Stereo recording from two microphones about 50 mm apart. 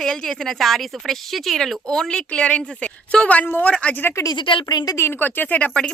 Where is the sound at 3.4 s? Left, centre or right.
Left.